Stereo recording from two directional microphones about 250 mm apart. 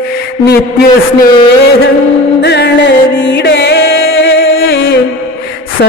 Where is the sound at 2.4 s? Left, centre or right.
Left.